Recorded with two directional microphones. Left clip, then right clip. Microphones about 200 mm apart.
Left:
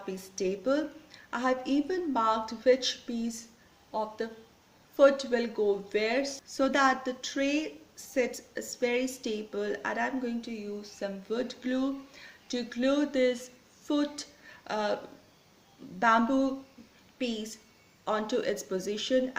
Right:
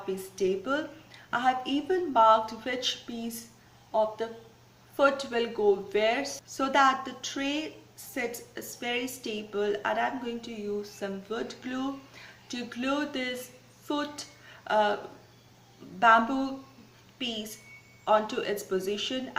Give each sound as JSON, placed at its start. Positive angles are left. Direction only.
{"t": 0.3, "sound": "speech", "side_deg": 45}
{"t": 4.9, "sound": "speech", "side_deg": 45}
{"t": 16.0, "sound": "speech", "side_deg": 45}
{"t": 18.0, "sound": "speech", "side_deg": 45}